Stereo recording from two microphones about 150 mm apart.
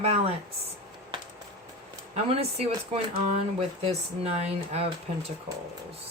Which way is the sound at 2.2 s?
45° right (ahead or behind).